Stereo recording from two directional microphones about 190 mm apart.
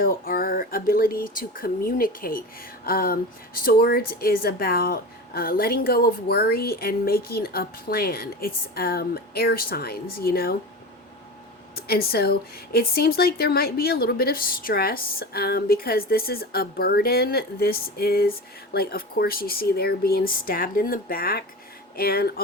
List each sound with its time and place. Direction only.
0.0 s speech: 50° left (ahead or behind)
11.7 s speech: 55° left (ahead or behind)